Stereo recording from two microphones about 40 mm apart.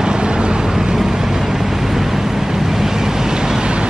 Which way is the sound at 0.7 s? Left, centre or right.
Centre.